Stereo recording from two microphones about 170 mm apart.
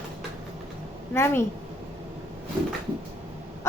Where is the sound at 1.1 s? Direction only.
15° left (ahead or behind).